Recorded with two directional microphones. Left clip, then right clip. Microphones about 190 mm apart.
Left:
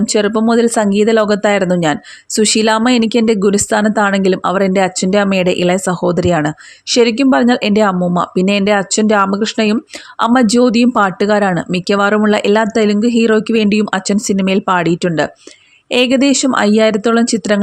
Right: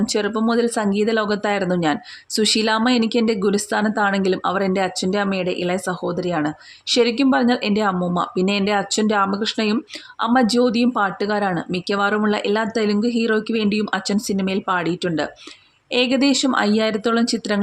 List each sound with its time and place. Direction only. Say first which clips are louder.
0.0 s speech: left 7 dB; 30° left (ahead or behind)